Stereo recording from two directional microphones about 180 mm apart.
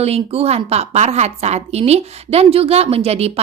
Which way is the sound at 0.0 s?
35° right (ahead or behind).